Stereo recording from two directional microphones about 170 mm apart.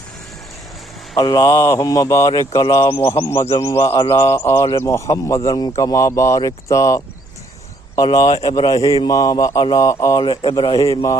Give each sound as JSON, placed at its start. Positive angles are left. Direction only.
{"t": 1.1, "sound": "speech", "side_deg": 25}
{"t": 9.0, "sound": "speech", "side_deg": 20}